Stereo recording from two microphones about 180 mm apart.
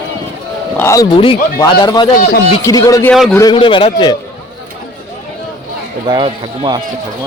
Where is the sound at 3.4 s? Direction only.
25° left (ahead or behind).